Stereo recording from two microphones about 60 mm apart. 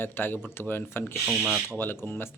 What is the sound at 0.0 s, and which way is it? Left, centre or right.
Speech, left.